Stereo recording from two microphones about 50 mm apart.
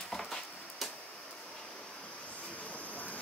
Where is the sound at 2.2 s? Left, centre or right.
Left.